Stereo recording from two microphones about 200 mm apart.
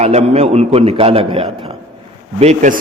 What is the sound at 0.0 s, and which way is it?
A man's voice, 35° right (ahead or behind).